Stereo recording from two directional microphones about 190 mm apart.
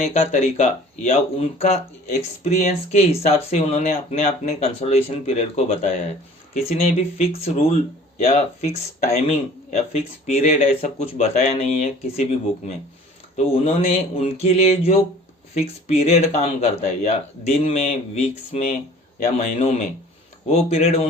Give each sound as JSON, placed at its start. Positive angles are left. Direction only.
{"t": 0.0, "sound": "speech", "side_deg": 35}